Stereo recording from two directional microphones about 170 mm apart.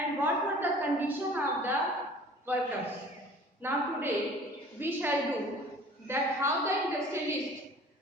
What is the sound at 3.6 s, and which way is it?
Speech, 15° right (ahead or behind).